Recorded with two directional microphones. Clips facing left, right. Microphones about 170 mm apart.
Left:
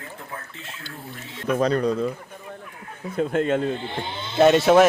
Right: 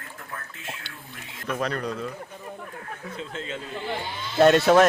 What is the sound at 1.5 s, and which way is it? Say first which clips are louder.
Speech: left 7 dB; 30° left (ahead or behind).